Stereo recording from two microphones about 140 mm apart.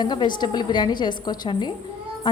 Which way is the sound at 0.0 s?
30° left (ahead or behind).